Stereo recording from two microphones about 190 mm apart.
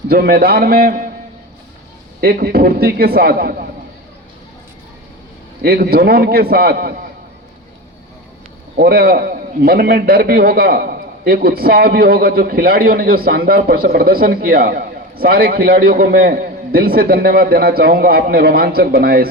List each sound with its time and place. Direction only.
0.1 s a man's voice: 55° right (ahead or behind)
2.2 s a man's voice: 55° right (ahead or behind)
5.6 s a man's voice: 55° right (ahead or behind)
8.7 s a man's voice: 55° right (ahead or behind)